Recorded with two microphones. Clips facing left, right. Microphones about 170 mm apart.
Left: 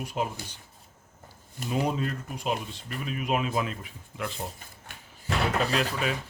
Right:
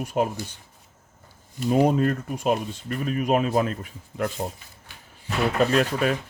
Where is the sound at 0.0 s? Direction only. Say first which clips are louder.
Right 7 dB; 45° right (ahead or behind).